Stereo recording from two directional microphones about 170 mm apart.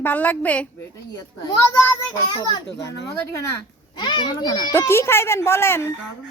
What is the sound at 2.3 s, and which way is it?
Speech, 20° left (ahead or behind).